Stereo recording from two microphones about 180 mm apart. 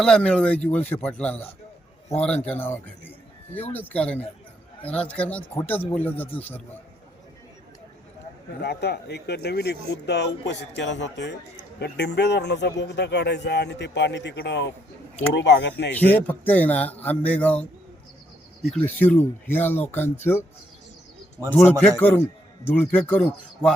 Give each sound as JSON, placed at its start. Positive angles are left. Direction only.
{"t": 0.0, "sound": "speech", "side_deg": 5}
{"t": 8.6, "sound": "a man's voice", "side_deg": 65}
{"t": 11.8, "sound": "a man's voice", "side_deg": 70}
{"t": 15.9, "sound": "speech", "side_deg": 10}
{"t": 19.0, "sound": "speech", "side_deg": 10}
{"t": 21.5, "sound": "speech", "side_deg": 10}